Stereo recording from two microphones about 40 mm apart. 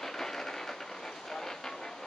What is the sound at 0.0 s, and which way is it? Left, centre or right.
Vehicle, centre.